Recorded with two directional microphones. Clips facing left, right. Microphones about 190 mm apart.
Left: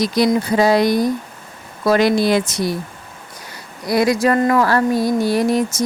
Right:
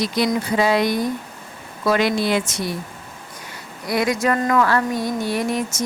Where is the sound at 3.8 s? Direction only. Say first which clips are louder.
Left 4 dB; 35° left (ahead or behind).